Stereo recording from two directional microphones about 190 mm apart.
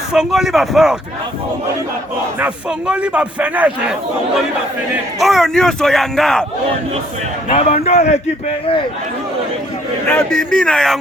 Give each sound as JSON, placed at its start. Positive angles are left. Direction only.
{"t": 0.1, "sound": "speech", "side_deg": 0}
{"t": 2.4, "sound": "a man's voice", "side_deg": -5}
{"t": 5.2, "sound": "speech", "side_deg": 0}
{"t": 7.5, "sound": "a man's voice", "side_deg": 35}
{"t": 10.1, "sound": "speech", "side_deg": 10}